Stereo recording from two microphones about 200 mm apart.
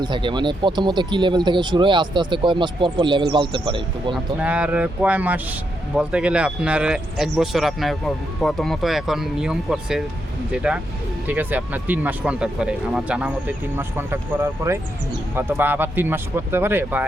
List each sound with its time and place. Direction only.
0.0 s speech: 25° right (ahead or behind)
4.1 s speech: 5° right (ahead or behind)